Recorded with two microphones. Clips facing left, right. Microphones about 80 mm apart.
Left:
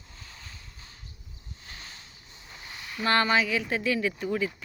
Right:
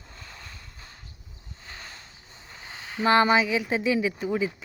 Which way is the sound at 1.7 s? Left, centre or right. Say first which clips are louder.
Right 4 dB; right.